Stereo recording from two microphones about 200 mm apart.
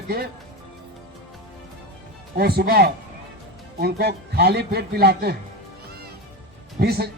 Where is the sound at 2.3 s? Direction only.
50° right (ahead or behind).